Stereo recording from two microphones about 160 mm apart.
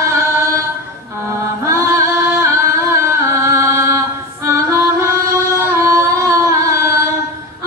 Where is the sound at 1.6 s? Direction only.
20° right (ahead or behind).